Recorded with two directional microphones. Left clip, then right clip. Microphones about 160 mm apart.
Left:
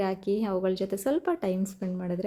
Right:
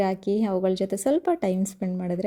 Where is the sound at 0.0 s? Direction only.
30° right (ahead or behind).